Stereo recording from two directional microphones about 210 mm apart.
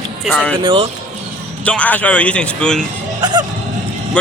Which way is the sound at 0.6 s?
25° right (ahead or behind).